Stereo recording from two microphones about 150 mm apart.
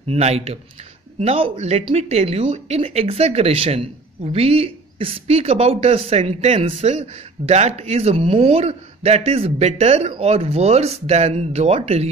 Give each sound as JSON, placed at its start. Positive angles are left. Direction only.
{"t": 0.1, "sound": "speech", "side_deg": -45}